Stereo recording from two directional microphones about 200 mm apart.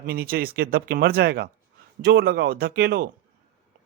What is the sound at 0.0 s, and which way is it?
Speech, 45° right (ahead or behind).